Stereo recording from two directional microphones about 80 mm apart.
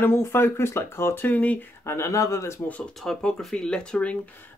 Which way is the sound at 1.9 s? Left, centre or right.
Left.